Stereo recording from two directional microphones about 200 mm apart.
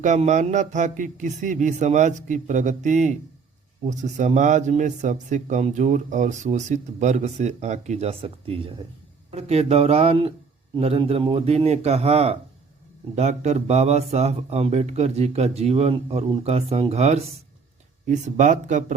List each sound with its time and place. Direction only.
0.0 s speech: 35° right (ahead or behind)